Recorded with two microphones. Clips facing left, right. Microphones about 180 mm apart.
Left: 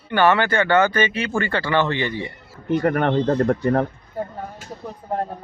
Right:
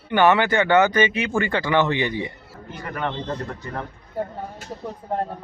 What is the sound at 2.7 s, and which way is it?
Speech, 60° left (ahead or behind).